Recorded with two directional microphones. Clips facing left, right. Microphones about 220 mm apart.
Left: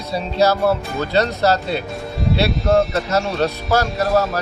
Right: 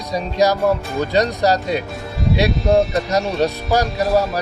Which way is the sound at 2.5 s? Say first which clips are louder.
Right 1 dB; centre (ahead or behind).